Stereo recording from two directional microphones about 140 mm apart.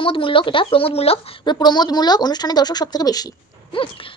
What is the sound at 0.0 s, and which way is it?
Speech, 40° left (ahead or behind).